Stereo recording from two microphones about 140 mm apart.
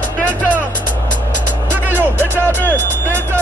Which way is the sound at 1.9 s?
15° right (ahead or behind).